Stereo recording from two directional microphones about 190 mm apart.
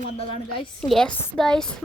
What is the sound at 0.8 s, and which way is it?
Speech, 5° left (ahead or behind).